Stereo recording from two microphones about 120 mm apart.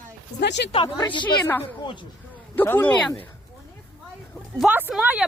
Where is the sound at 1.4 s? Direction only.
15° left (ahead or behind).